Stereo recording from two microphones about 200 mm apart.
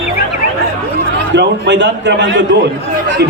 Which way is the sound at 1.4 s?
60° right (ahead or behind).